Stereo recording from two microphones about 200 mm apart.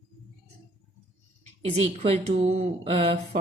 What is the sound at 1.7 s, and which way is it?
A woman's voice, 30° right (ahead or behind).